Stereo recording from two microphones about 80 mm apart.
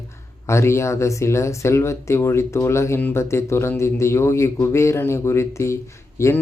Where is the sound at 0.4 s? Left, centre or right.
Left.